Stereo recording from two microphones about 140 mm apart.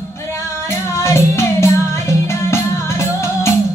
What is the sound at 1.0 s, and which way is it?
Music, 20° left (ahead or behind).